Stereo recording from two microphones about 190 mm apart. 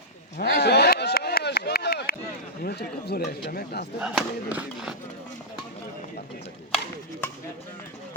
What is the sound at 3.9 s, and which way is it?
Speech, 5° right (ahead or behind).